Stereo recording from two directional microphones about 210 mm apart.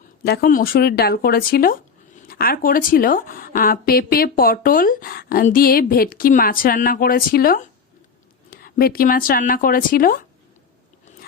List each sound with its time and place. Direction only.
0.3 s speech: 45° left (ahead or behind)